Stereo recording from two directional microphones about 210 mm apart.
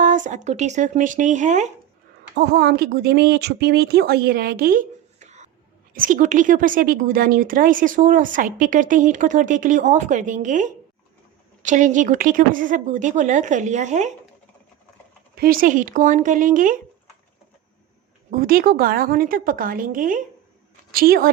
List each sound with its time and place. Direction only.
0.0 s speech: 35° right (ahead or behind)
2.3 s speech: 50° right (ahead or behind); by 14.1 s 35° right (ahead or behind)
15.4 s speech: 45° right (ahead or behind)
18.3 s a woman's voice: 40° right (ahead or behind)